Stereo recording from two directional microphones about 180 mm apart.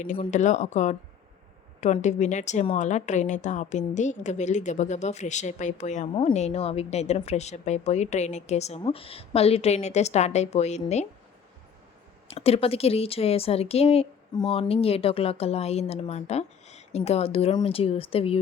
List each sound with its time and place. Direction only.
0.3 s a woman's voice: 40° left (ahead or behind)
12.3 s a woman's voice: 35° left (ahead or behind)